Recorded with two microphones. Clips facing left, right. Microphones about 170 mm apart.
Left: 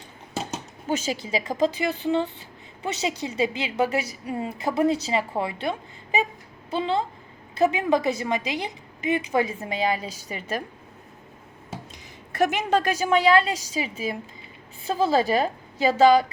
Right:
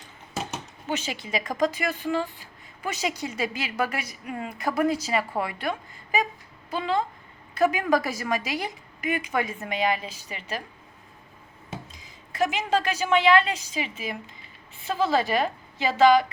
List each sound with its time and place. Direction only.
0.9 s a woman's voice: 40° left (ahead or behind); by 8.7 s 20° left (ahead or behind)
9.1 s a woman's voice: 30° left (ahead or behind); by 10.6 s 45° left (ahead or behind)
11.9 s a woman's voice: 60° left (ahead or behind); by 16.2 s 35° left (ahead or behind)